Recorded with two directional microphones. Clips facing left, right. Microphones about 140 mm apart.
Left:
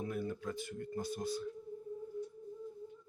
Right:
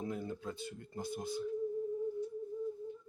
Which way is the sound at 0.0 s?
20° right (ahead or behind).